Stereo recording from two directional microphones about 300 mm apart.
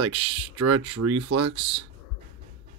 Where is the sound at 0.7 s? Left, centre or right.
Right.